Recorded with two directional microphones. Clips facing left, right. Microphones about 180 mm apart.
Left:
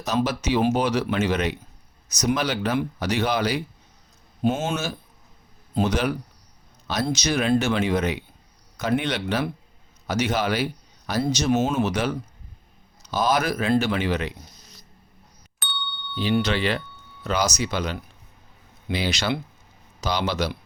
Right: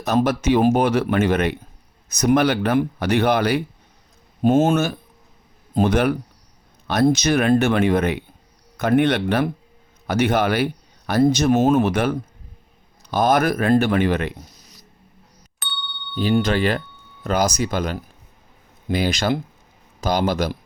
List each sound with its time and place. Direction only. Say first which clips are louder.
0.0 s speech: right 5 dB; 55° right (ahead or behind)
15.5 s ding: left 1 dB; centre (ahead or behind)
16.1 s speech: right 4 dB; 45° right (ahead or behind)